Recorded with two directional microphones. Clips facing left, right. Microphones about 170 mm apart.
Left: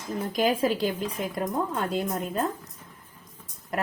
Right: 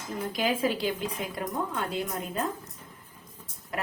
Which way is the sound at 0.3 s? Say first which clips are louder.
Left 4 dB; 40° left (ahead or behind).